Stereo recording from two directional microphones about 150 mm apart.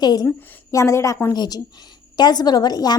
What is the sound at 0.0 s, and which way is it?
A woman's voice, 30° left (ahead or behind).